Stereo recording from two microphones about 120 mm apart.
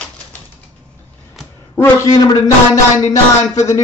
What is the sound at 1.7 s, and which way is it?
Speech, 15° left (ahead or behind).